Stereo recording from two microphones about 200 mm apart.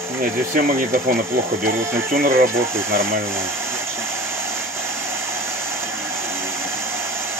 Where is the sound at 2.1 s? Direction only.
45° right (ahead or behind).